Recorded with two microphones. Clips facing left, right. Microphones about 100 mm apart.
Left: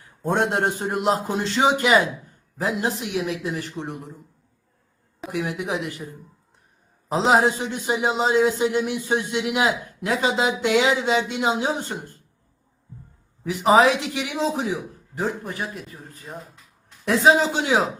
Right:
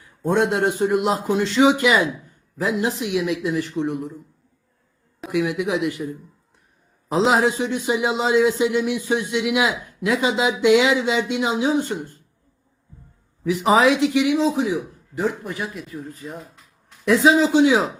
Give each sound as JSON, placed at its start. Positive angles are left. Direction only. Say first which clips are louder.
{"t": 0.0, "sound": "speech", "louder": "right 3 dB", "side_deg": 40}
{"t": 5.3, "sound": "speech", "louder": "right 5 dB", "side_deg": 35}
{"t": 7.1, "sound": "speech", "louder": "right 1 dB", "side_deg": 30}
{"t": 13.5, "sound": "speech", "louder": "even", "side_deg": 35}
{"t": 17.1, "sound": "speech", "louder": "right 2 dB", "side_deg": 40}